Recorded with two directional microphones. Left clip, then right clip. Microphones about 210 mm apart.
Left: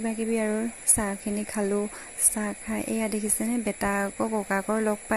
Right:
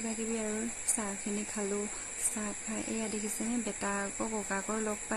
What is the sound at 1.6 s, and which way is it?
Speech, 35° left (ahead or behind).